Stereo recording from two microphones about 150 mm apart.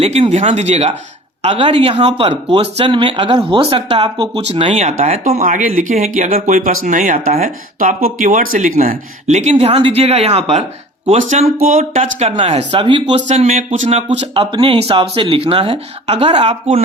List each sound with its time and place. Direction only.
0.0 s speech: 45° right (ahead or behind)
1.4 s speech: 35° right (ahead or behind)
5.4 s speech: 65° right (ahead or behind)
9.2 s speech: 50° right (ahead or behind); by 13.2 s 30° right (ahead or behind)
13.2 s speech: 50° right (ahead or behind)